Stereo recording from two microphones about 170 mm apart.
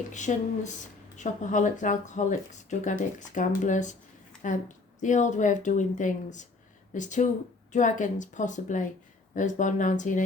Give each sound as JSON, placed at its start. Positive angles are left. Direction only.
{"t": 0.1, "sound": "speech", "side_deg": 45}